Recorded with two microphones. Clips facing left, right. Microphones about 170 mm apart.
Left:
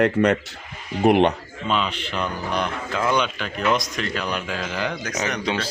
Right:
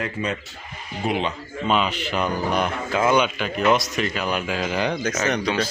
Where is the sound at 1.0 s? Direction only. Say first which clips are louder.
Left 8 dB; 65° left (ahead or behind).